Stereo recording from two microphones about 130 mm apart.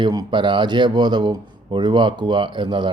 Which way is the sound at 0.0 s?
30° right (ahead or behind).